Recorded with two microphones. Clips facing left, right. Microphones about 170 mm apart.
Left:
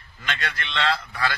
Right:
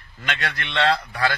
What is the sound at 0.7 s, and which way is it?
Speech, 35° right (ahead or behind).